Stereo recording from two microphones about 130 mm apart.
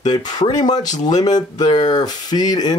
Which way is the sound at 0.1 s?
30° left (ahead or behind).